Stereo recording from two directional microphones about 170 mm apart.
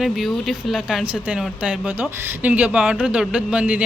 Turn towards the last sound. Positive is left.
turn(degrees=-5)  # may be behind; listen again after turning